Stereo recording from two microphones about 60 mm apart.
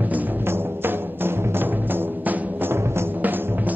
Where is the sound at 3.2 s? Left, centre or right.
Right.